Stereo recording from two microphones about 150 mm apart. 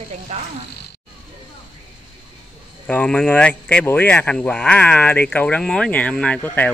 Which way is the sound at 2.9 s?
5° left (ahead or behind).